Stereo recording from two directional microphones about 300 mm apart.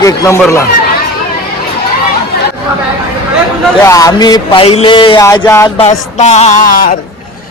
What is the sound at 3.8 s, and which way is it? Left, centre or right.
Music, centre.